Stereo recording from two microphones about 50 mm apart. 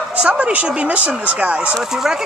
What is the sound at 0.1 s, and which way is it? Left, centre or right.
Speech, right.